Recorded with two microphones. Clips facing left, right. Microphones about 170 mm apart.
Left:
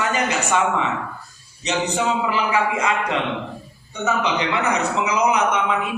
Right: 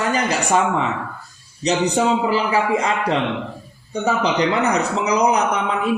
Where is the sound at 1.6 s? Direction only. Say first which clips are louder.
Right 4 dB; 35° right (ahead or behind).